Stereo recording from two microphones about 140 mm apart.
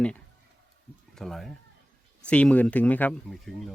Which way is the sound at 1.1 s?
Centre (ahead or behind).